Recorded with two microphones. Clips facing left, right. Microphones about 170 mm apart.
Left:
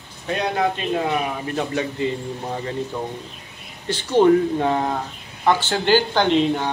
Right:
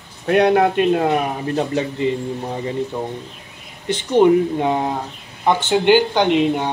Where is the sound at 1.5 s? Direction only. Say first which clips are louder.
Right 3 dB; 30° right (ahead or behind).